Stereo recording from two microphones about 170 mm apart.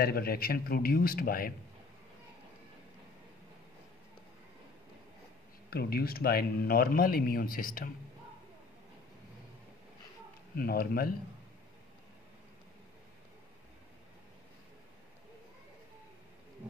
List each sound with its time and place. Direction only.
0.0 s speech: 65° left (ahead or behind)
5.7 s speech: 65° left (ahead or behind)
10.5 s speech: 65° left (ahead or behind)